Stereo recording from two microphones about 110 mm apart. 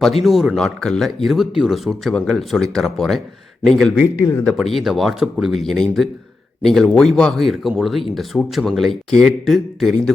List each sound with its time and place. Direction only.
0.0 s speech: centre (ahead or behind)
4.2 s speech: 25° left (ahead or behind)
4.4 s speech: centre (ahead or behind)